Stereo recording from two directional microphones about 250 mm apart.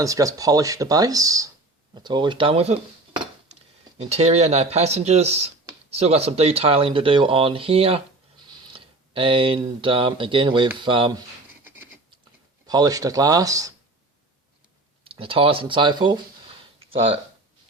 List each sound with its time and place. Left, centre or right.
0.0 s speech: centre
11.6 s a sound: centre
12.6 s speech: centre
15.0 s speech: right